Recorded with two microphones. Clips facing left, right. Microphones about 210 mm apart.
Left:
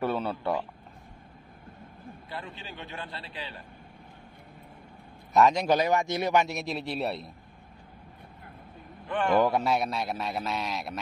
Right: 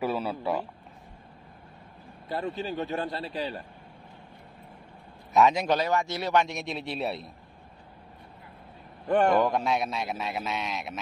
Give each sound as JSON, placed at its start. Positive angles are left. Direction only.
{"t": 0.0, "sound": "speech", "side_deg": -5}
{"t": 2.2, "sound": "a man's voice", "side_deg": -40}
{"t": 5.3, "sound": "a man's voice", "side_deg": 0}
{"t": 5.7, "sound": "speech", "side_deg": 15}
{"t": 6.4, "sound": "a man's voice", "side_deg": 0}
{"t": 9.0, "sound": "a man's voice", "side_deg": -45}
{"t": 9.4, "sound": "a man's voice", "side_deg": 5}